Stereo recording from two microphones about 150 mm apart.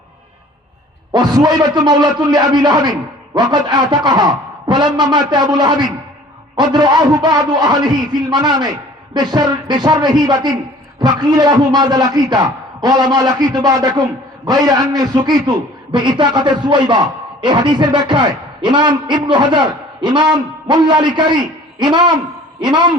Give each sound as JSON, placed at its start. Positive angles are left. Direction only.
{"t": 1.1, "sound": "a man's voice", "side_deg": -25}